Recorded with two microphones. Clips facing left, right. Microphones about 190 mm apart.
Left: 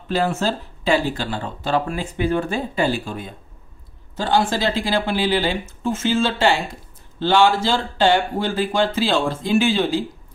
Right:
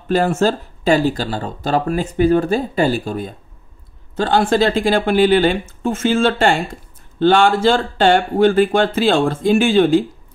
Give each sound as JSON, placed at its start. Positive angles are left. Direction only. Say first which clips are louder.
{"t": 0.1, "sound": "speech", "louder": "right 5 dB", "side_deg": -45}
{"t": 4.2, "sound": "speech", "louder": "right 5 dB", "side_deg": -60}